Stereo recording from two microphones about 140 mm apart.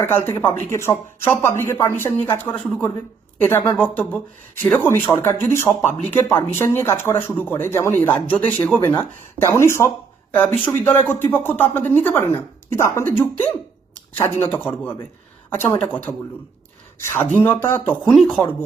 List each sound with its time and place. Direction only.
0.0 s a woman's voice: 15° left (ahead or behind)
14.5 s a woman's voice: 10° left (ahead or behind)
18.1 s speech: centre (ahead or behind)